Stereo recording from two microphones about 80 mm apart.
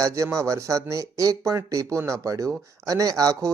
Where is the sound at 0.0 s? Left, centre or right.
Right.